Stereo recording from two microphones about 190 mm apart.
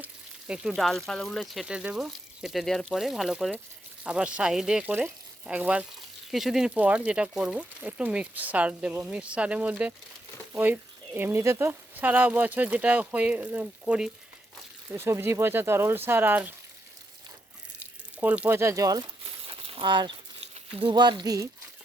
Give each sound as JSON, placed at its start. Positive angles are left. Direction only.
{"t": 0.0, "sound": "speech", "side_deg": -5}
{"t": 18.2, "sound": "speech", "side_deg": -10}
{"t": 19.5, "sound": "crumpling", "side_deg": -30}
{"t": 20.8, "sound": "speech", "side_deg": -25}